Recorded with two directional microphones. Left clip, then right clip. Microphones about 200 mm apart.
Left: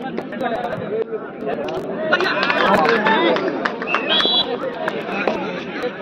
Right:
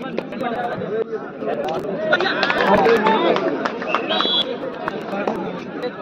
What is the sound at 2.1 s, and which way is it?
Chatter, 35° left (ahead or behind).